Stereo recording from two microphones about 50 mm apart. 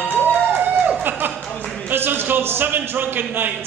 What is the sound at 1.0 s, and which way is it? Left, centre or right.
A man's voice, right.